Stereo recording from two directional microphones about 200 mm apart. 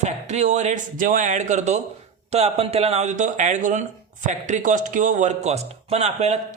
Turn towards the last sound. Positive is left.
turn(degrees=-35)  # may be behind; listen again after turning